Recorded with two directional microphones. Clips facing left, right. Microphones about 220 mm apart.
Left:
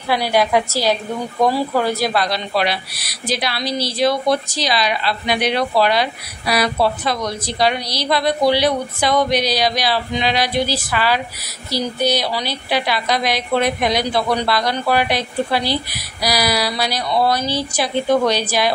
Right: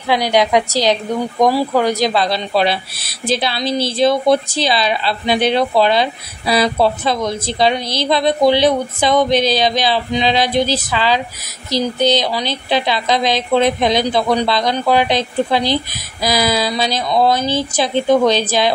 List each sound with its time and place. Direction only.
0.1 s speech: 20° right (ahead or behind)